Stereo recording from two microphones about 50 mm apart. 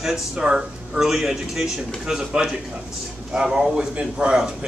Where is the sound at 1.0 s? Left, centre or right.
Centre.